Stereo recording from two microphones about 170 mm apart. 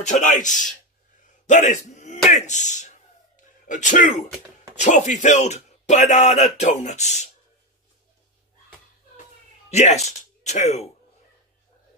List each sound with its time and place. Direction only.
0.0 s speech: 45° left (ahead or behind)
1.5 s a sound: 45° left (ahead or behind)
4.7 s speech: 45° left (ahead or behind)
9.7 s speech: 40° left (ahead or behind)